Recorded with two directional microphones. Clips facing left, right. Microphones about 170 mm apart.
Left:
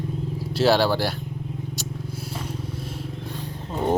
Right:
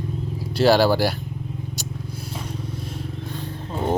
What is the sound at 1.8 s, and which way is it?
Vehicle, 5° left (ahead or behind).